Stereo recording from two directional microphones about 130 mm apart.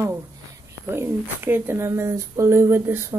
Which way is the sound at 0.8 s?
20° right (ahead or behind).